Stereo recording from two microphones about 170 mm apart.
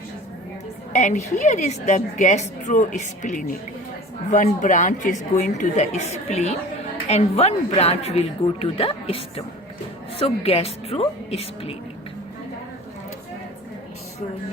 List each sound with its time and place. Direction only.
0.9 s a woman's voice: 45° left (ahead or behind)